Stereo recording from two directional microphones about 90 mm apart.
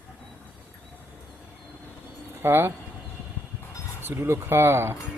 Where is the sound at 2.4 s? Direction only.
25° right (ahead or behind).